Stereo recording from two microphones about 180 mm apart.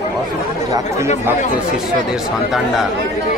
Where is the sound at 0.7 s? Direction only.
20° right (ahead or behind).